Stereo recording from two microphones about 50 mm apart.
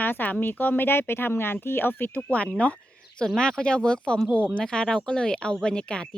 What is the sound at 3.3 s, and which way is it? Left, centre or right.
A child's voice, centre.